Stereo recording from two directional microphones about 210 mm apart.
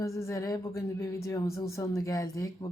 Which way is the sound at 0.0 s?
15° left (ahead or behind).